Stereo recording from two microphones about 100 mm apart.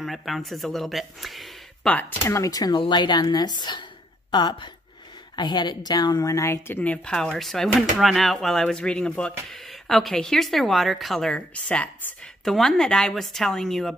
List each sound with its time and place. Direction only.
0.0 s speech: centre (ahead or behind)
1.9 s speech: 20° left (ahead or behind)
2.3 s a woman's voice: 35° left (ahead or behind)
6.8 s speech: 10° left (ahead or behind)